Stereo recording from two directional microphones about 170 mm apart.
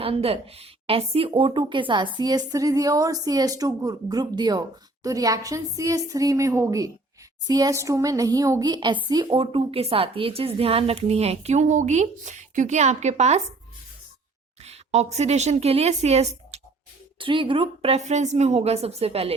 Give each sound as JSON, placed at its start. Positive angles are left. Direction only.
{"t": 0.0, "sound": "a woman's voice", "side_deg": -35}
{"t": 14.6, "sound": "a woman's voice", "side_deg": -40}